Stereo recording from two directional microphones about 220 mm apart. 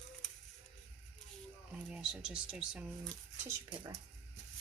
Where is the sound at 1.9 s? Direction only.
5° right (ahead or behind).